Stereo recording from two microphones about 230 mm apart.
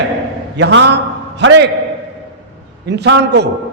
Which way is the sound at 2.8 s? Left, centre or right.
Right.